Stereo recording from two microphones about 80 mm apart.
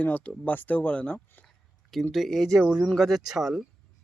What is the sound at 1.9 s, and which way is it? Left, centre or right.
Speech, centre.